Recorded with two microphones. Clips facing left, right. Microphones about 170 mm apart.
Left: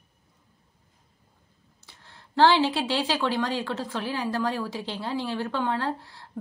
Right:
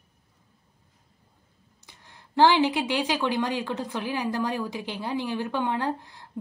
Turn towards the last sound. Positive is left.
turn(degrees=-15)  # may be behind; listen again after turning